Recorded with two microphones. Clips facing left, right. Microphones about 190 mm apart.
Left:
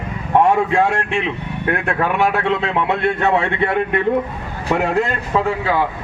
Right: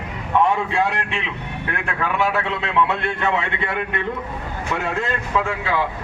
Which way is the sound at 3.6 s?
55° left (ahead or behind).